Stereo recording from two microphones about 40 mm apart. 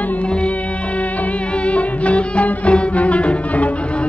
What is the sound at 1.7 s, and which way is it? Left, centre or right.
Music, left.